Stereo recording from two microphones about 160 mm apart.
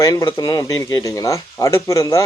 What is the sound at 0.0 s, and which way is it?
Speech, 20° left (ahead or behind).